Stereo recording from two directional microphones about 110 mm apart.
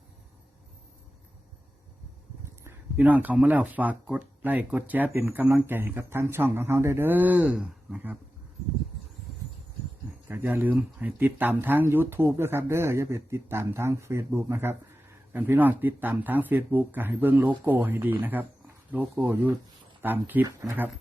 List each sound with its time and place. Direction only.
2.6 s speech: 15° right (ahead or behind)
10.2 s speech: 20° right (ahead or behind)